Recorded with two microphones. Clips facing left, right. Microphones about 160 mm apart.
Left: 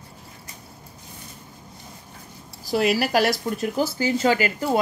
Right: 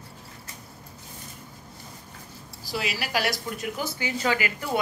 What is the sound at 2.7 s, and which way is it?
Speech, 50° left (ahead or behind).